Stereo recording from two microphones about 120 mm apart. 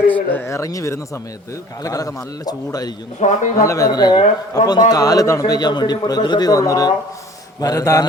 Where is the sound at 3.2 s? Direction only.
75° left (ahead or behind).